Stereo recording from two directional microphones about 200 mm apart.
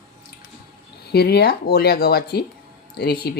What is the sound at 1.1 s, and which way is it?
Speech, 55° left (ahead or behind).